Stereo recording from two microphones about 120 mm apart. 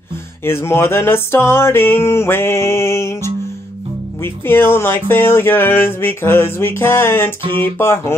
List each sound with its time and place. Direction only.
0.5 s speech: 20° left (ahead or behind)